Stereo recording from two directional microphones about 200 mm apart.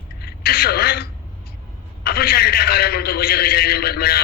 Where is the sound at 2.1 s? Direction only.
50° left (ahead or behind).